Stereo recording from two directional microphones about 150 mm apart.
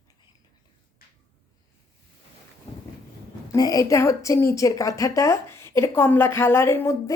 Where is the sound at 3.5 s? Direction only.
25° left (ahead or behind).